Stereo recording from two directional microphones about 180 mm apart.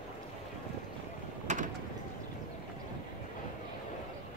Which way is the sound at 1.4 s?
45° right (ahead or behind).